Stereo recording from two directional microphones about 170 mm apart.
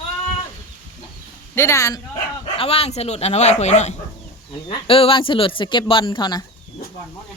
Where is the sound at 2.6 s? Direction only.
35° left (ahead or behind).